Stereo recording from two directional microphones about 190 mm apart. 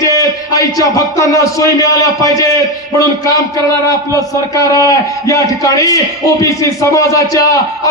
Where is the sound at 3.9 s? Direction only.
15° left (ahead or behind).